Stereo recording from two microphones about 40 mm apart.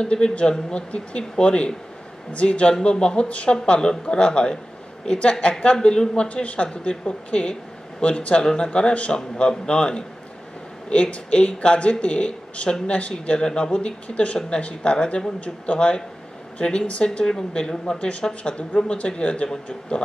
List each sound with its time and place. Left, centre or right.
0.0 s speech: left